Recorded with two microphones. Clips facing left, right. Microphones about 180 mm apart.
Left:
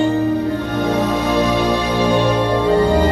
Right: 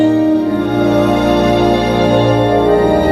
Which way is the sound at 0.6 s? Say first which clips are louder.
Right 7 dB; 65° right (ahead or behind).